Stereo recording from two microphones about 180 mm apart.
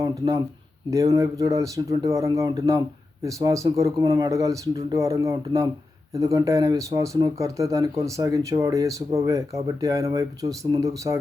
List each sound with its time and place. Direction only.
0.9 s speech: 15° right (ahead or behind)